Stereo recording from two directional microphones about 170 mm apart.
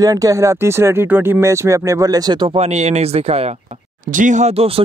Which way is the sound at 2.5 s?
40° right (ahead or behind).